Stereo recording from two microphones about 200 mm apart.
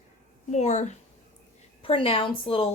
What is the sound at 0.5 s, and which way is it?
A woman's voice, 35° left (ahead or behind).